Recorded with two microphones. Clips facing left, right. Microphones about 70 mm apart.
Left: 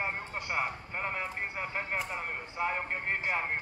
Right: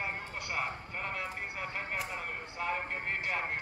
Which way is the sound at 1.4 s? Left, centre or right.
Left.